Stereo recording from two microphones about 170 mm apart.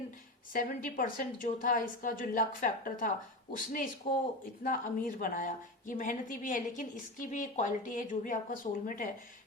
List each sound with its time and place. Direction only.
0.5 s a woman's voice: 50° left (ahead or behind)